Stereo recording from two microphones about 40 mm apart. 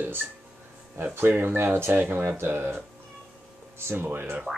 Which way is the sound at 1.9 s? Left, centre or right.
Right.